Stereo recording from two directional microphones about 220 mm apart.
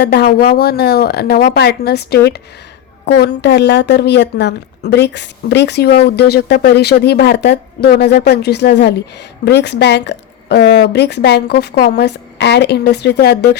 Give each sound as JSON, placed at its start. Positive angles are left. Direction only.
{"t": 0.0, "sound": "a woman's voice", "side_deg": 45}